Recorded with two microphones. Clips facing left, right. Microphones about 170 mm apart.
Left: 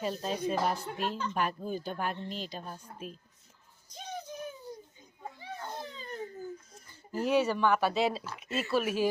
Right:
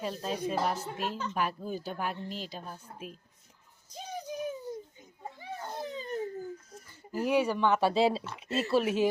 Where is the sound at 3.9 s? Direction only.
10° right (ahead or behind).